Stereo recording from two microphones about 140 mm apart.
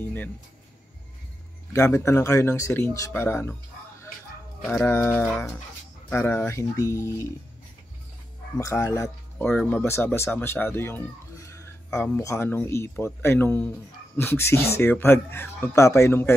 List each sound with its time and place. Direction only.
0.0 s speech: 10° left (ahead or behind)
1.7 s speech: 20° left (ahead or behind)
4.8 s speech: 15° left (ahead or behind)
8.5 s speech: 20° left (ahead or behind)
9.5 s speech: 10° left (ahead or behind)